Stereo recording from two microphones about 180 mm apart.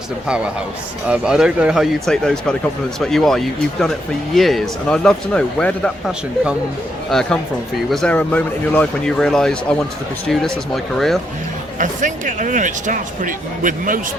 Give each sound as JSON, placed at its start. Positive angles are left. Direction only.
{"t": 0.3, "sound": "speech", "side_deg": -5}
{"t": 10.9, "sound": "speech", "side_deg": 0}
{"t": 11.8, "sound": "speech", "side_deg": -45}